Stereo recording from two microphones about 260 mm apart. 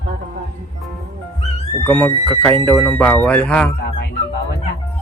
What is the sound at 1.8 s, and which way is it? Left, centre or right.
Speech, centre.